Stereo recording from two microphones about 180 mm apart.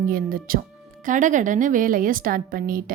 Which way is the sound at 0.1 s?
55° right (ahead or behind).